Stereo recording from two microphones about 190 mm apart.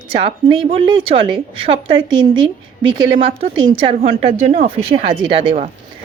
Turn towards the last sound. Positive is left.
turn(degrees=-30)  # may be behind; listen again after turning